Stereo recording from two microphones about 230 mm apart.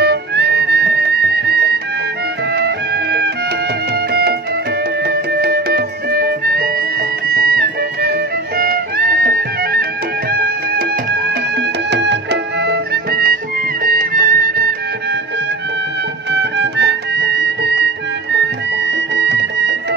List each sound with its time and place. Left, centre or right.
0.0 s music: right
8.5 s music: right
11.9 s music: right
16.3 s music: right